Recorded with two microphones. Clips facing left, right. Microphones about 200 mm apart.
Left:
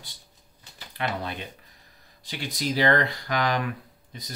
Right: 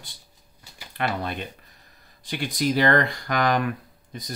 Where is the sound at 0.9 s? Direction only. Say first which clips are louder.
Right 3 dB; 55° right (ahead or behind).